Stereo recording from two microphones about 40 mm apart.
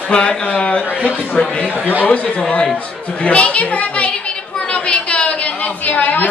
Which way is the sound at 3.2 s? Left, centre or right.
Left.